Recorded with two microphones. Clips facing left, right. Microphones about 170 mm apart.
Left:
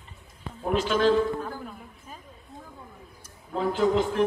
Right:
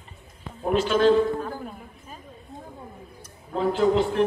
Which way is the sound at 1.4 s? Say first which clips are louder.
Right 3 dB; 15° right (ahead or behind).